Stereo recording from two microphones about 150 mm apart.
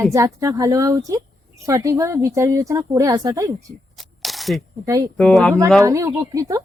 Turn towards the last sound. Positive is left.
turn(degrees=-20)  # may be behind; listen again after turning